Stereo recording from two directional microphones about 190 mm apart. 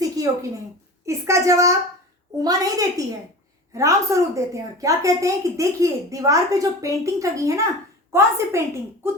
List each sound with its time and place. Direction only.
1.0 s a woman's voice: 15° right (ahead or behind)